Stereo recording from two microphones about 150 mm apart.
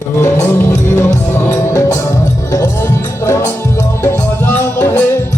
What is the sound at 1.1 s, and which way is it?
Music, 50° left (ahead or behind).